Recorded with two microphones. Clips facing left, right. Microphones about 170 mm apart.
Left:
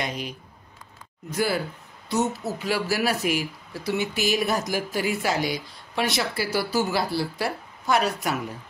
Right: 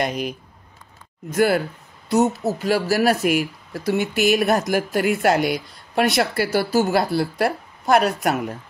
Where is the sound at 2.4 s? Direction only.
45° right (ahead or behind).